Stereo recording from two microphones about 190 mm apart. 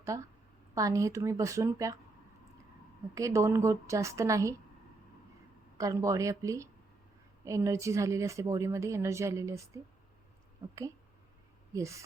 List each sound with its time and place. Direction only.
0.7 s speech: 20° right (ahead or behind)
3.2 s speech: 15° right (ahead or behind)
5.7 s speech: 15° right (ahead or behind)
11.7 s speech: 15° right (ahead or behind)